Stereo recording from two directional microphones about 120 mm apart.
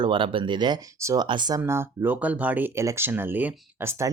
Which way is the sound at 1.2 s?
40° right (ahead or behind).